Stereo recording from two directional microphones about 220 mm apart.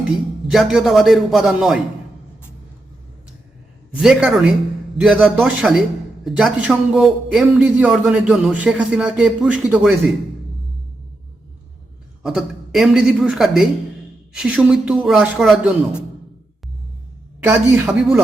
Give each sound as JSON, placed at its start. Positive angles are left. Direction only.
{"t": 0.5, "sound": "a man's voice", "side_deg": 0}
{"t": 4.0, "sound": "a man's voice", "side_deg": -5}
{"t": 12.2, "sound": "a man's voice", "side_deg": 0}
{"t": 17.4, "sound": "speech", "side_deg": -10}